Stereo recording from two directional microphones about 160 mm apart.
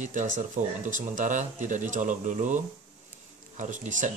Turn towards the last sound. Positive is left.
turn(degrees=-50)  # may be behind; listen again after turning